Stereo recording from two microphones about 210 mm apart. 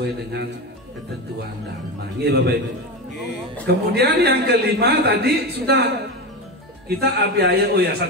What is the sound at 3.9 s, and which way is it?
A man's voice, 50° right (ahead or behind).